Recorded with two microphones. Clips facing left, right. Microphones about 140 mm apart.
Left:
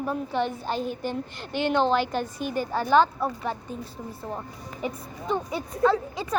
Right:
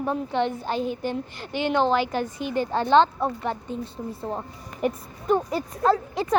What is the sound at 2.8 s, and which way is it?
Speech, 10° left (ahead or behind).